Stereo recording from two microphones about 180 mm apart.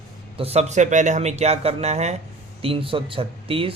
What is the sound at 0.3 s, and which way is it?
A man's voice, 35° right (ahead or behind).